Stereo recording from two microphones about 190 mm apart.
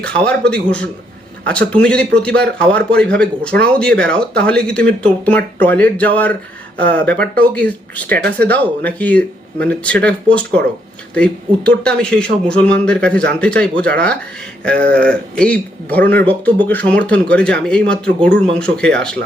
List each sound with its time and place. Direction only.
0.0 s speech: 5° left (ahead or behind)